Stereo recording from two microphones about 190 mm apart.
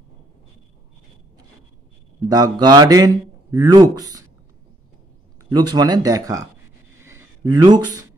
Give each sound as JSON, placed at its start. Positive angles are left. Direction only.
{"t": 2.2, "sound": "a man's voice", "side_deg": -20}
{"t": 5.5, "sound": "a man's voice", "side_deg": -20}
{"t": 7.0, "sound": "a sound", "side_deg": -15}